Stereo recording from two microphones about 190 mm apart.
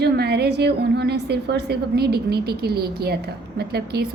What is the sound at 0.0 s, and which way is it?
A woman's voice, 60° right (ahead or behind).